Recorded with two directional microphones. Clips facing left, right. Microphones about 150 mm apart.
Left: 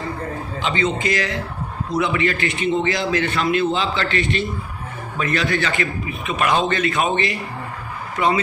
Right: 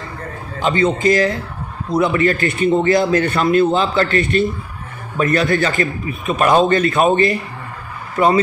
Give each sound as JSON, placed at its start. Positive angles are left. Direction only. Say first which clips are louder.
{"t": 0.6, "sound": "a man's voice", "louder": "right 6 dB", "side_deg": -45}